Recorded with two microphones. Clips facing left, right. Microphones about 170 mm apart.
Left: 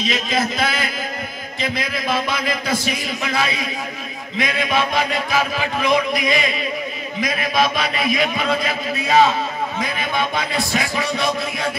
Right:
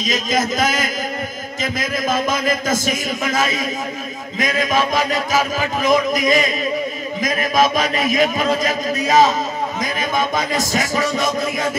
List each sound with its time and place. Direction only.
0.0 s speech: 40° right (ahead or behind)